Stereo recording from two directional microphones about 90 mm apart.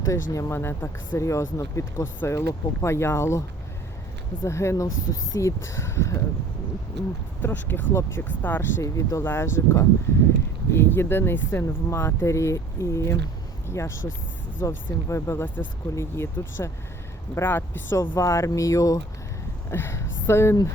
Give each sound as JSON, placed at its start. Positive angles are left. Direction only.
{"t": 0.0, "sound": "speech", "side_deg": 35}
{"t": 4.4, "sound": "speech", "side_deg": 35}
{"t": 7.4, "sound": "speech", "side_deg": 20}
{"t": 8.8, "sound": "speech", "side_deg": 35}
{"t": 19.7, "sound": "speech", "side_deg": 30}